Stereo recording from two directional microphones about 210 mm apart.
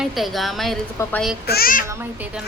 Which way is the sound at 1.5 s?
45° left (ahead or behind).